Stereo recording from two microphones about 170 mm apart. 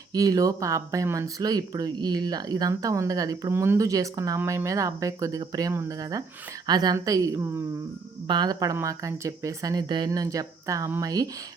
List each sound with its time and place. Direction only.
0.1 s speech: 20° right (ahead or behind)